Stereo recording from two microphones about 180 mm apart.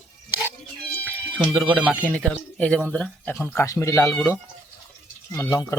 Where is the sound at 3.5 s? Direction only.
15° left (ahead or behind).